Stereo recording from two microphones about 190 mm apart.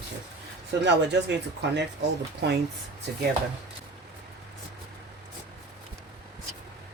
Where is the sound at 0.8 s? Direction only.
65° right (ahead or behind).